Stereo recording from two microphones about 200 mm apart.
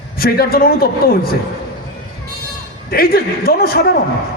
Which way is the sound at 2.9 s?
50° left (ahead or behind).